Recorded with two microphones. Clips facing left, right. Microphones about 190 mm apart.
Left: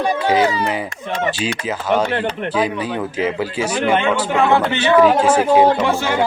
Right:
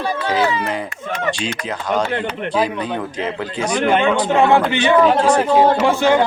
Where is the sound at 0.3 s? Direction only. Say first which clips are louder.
Right 1 dB; 35° left (ahead or behind).